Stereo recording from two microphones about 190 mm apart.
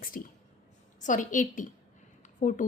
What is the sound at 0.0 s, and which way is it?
A woman's voice, 50° left (ahead or behind).